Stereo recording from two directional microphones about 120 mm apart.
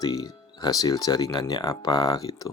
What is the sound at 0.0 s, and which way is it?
Speech, 30° left (ahead or behind).